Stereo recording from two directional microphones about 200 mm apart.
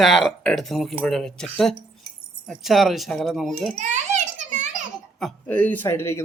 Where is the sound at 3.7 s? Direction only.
35° right (ahead or behind).